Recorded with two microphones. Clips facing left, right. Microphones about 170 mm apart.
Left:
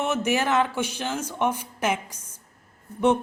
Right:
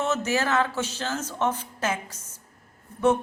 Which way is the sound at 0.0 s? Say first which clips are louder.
Left 1 dB; 15° left (ahead or behind).